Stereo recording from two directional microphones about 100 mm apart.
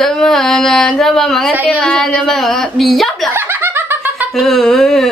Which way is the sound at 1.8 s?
10° left (ahead or behind).